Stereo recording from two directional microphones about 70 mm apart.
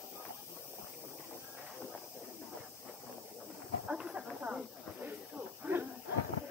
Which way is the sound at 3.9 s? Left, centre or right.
Centre.